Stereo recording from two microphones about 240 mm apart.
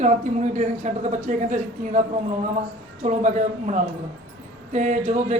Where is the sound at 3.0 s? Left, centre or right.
Right.